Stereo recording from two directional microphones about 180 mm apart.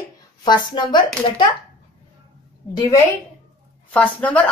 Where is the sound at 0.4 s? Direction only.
25° left (ahead or behind).